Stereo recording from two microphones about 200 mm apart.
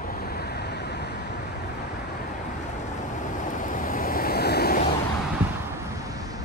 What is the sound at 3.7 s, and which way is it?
Waves, 40° left (ahead or behind).